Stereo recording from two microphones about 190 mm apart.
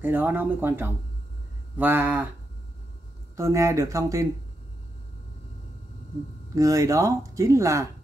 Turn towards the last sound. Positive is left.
turn(degrees=-15)  # may be behind; listen again after turning